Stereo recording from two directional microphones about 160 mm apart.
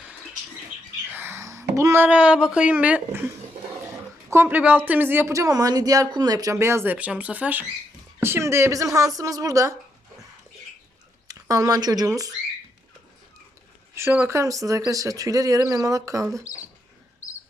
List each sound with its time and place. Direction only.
1.1 s speech: 15° right (ahead or behind)
11.3 s speech: 20° right (ahead or behind)
13.9 s speech: 15° right (ahead or behind)